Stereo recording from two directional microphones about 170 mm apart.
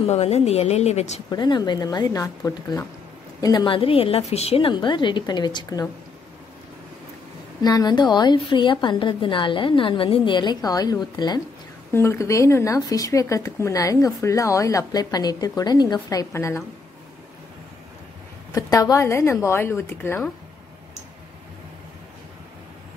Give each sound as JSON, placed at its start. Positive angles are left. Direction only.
{"t": 0.0, "sound": "a woman's voice", "side_deg": 40}
{"t": 1.3, "sound": "speech", "side_deg": 25}
{"t": 7.6, "sound": "speech", "side_deg": 25}
{"t": 18.5, "sound": "a woman's voice", "side_deg": 20}